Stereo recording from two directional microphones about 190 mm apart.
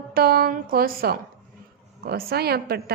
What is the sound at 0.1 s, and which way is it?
A woman's voice, 55° right (ahead or behind).